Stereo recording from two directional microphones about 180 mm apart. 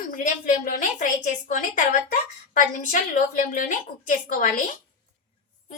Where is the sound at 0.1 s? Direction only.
50° left (ahead or behind).